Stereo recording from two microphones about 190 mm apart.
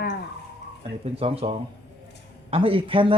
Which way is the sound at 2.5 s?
30° right (ahead or behind).